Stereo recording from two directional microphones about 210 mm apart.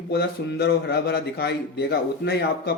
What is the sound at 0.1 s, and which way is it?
Speech, 50° left (ahead or behind).